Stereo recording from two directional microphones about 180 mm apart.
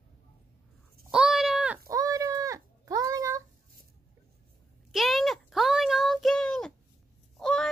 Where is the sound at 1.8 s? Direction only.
20° right (ahead or behind).